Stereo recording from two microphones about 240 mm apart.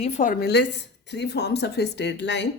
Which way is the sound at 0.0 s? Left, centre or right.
Left.